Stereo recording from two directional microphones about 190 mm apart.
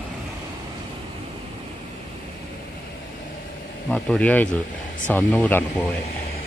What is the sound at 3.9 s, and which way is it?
A man's voice, 5° left (ahead or behind).